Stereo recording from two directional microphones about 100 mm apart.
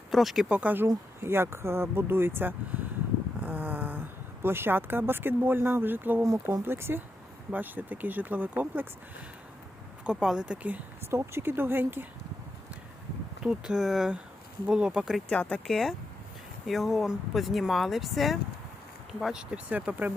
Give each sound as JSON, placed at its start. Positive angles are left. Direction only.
{"t": 0.1, "sound": "speech", "side_deg": 0}
{"t": 6.2, "sound": "speech", "side_deg": -30}
{"t": 10.0, "sound": "speech", "side_deg": -10}
{"t": 13.4, "sound": "speech", "side_deg": -5}
{"t": 15.3, "sound": "speech", "side_deg": 10}